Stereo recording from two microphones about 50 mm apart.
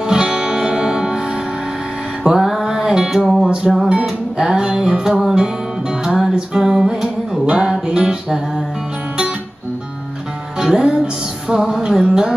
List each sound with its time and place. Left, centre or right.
0.0 s music: centre
10.6 s music: centre